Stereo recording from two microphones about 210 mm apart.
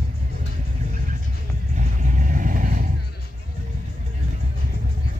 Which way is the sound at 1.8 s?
35° right (ahead or behind).